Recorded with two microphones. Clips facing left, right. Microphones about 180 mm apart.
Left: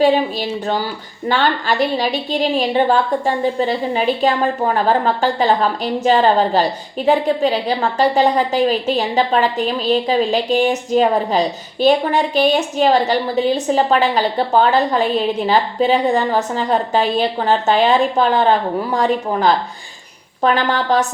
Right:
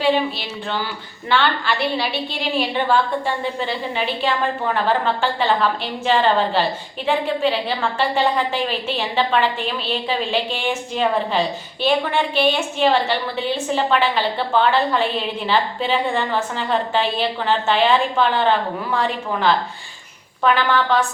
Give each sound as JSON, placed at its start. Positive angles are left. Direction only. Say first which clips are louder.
{"t": 0.0, "sound": "a woman's voice", "louder": "left 5 dB", "side_deg": 45}